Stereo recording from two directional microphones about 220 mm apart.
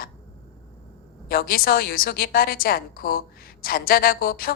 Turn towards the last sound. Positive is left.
turn(degrees=40)  # may be behind; listen again after turning